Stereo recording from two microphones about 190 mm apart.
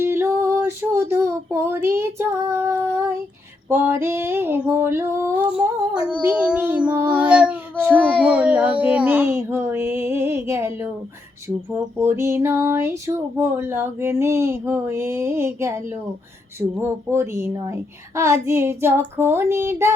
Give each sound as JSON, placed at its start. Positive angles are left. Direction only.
{"t": 0.0, "sound": "female singing", "side_deg": -15}
{"t": 17.1, "sound": "female singing", "side_deg": -15}